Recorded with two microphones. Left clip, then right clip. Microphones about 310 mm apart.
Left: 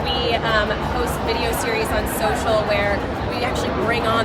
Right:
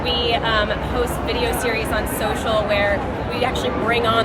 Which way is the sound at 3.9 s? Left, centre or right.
Centre.